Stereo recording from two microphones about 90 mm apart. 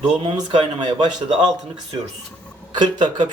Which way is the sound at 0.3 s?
60° right (ahead or behind).